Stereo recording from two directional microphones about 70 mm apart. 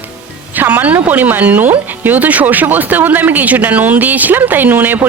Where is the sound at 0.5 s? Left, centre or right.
Right.